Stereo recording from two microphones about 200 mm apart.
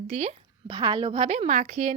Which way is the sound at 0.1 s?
35° right (ahead or behind).